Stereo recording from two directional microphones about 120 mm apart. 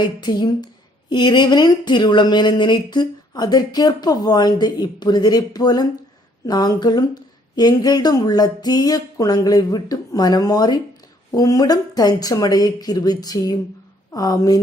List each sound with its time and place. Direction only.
0.0 s speech: 35° left (ahead or behind)